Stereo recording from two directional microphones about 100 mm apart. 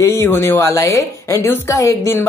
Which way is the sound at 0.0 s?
30° left (ahead or behind).